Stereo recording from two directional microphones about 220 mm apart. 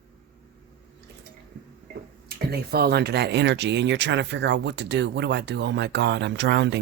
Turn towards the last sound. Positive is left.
turn(degrees=-50)  # may be behind; listen again after turning